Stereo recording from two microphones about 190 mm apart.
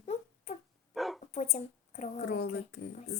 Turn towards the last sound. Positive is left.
turn(degrees=60)  # may be behind; listen again after turning